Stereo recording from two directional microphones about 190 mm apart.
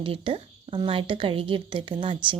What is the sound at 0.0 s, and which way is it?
A woman's voice, 30° right (ahead or behind).